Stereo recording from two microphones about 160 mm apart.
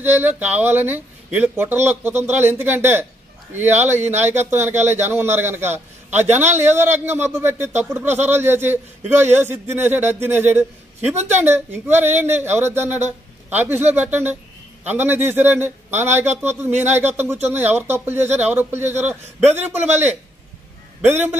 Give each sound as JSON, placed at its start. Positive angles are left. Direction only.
{"t": 0.0, "sound": "speech", "side_deg": -10}